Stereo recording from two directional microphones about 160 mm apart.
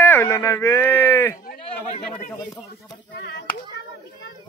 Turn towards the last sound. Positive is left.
turn(degrees=90)